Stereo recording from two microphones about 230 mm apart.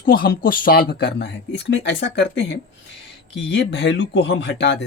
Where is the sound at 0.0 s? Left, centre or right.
Left.